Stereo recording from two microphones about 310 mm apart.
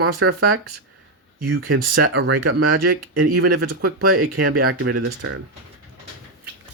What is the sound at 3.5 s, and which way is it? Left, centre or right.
Speech, right.